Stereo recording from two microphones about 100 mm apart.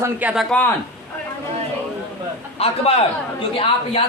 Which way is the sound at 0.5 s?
10° left (ahead or behind).